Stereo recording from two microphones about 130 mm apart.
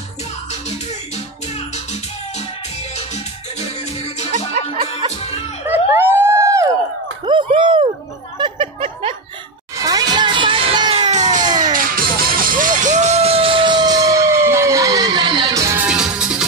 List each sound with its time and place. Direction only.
0.5 s music: 60° left (ahead or behind)
5.7 s a sound: 15° right (ahead or behind)
7.2 s a sound: 40° right (ahead or behind)
9.8 s music: 30° right (ahead or behind)
11.0 s music: 65° right (ahead or behind)
11.4 s music: 30° right (ahead or behind)
11.7 s music: 90° right; by 15.8 s 25° right (ahead or behind)
15.8 s music: 5° right (ahead or behind)